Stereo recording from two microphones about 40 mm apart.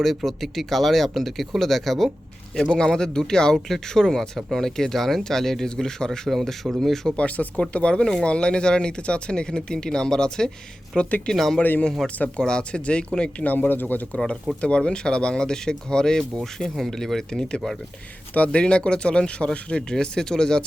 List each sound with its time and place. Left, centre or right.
0.0 s speech: centre
2.7 s speech: centre
6.1 s speech: centre
7.2 s speech: left; by 11.5 s centre
12.4 s speech: centre
13.4 s speech: left
14.6 s speech: left
18.3 s speech: left
18.6 s speech: left